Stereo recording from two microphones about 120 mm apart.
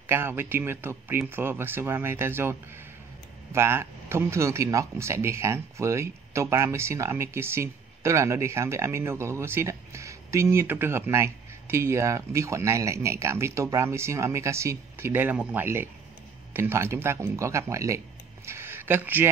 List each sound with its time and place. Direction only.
0.0 s speech: 20° right (ahead or behind)